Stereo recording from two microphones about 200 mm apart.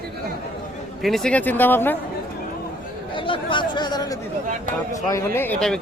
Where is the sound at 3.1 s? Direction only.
25° left (ahead or behind).